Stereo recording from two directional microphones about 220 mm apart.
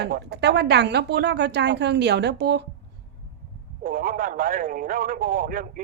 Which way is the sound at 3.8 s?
40° right (ahead or behind).